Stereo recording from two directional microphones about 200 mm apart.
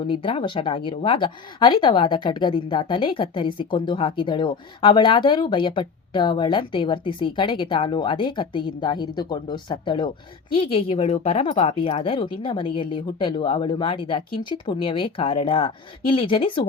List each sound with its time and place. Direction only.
0.0 s speech: 25° left (ahead or behind)